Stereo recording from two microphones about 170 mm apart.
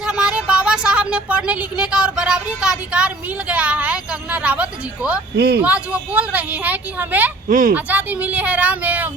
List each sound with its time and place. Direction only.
0.0 s a woman's voice: 5° right (ahead or behind)
7.4 s speech: 50° right (ahead or behind)
7.7 s a woman's voice: 10° right (ahead or behind)